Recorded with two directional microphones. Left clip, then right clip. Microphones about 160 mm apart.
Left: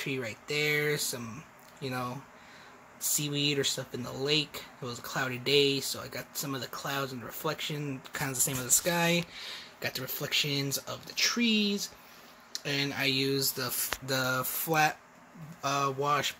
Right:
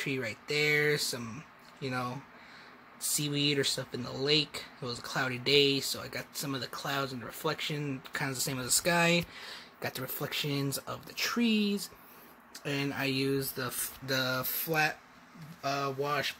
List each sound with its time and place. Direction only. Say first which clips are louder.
0.0 s speech: even; centre (ahead or behind); by 16.3 s 20° left (ahead or behind)